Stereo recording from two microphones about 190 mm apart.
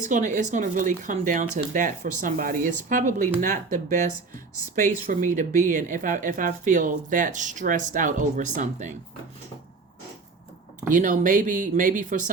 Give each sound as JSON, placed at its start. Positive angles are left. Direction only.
{"t": 0.0, "sound": "speech", "side_deg": -40}
{"t": 10.8, "sound": "speech", "side_deg": -45}